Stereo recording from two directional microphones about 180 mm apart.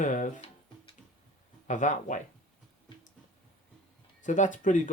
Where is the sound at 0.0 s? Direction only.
45° left (ahead or behind).